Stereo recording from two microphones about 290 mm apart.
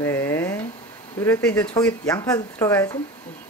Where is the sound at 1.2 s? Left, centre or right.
Centre.